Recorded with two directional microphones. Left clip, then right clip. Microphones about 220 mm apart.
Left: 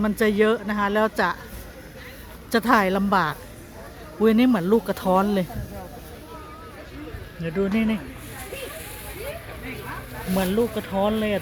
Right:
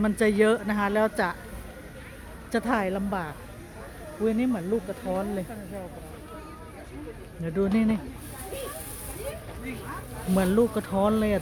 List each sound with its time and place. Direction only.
0.0 s speech: 5° left (ahead or behind)
2.5 s a woman's voice: 15° left (ahead or behind)
7.4 s speech: centre (ahead or behind)
10.3 s speech: 10° right (ahead or behind)